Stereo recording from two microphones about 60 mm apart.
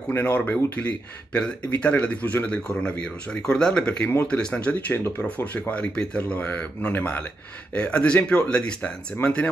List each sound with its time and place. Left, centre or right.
0.1 s speech: left; by 4.7 s centre
4.7 s speech: left